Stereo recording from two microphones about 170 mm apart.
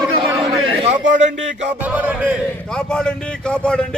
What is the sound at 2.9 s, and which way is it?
Speech, 5° left (ahead or behind).